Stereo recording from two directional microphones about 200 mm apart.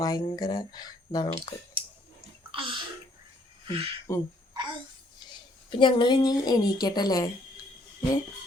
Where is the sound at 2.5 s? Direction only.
25° right (ahead or behind).